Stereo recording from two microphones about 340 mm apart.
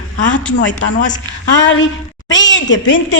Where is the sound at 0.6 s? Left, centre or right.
Left.